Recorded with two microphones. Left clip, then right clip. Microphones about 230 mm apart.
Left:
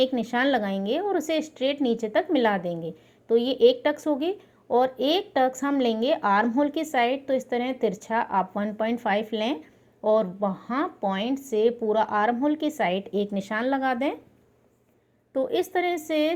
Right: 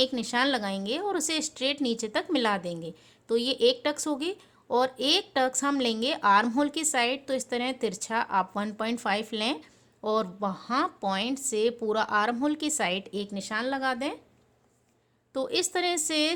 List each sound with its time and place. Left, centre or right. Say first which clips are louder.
0.0 s a woman's voice: left 3 dB; centre
15.3 s a woman's voice: left 3 dB; centre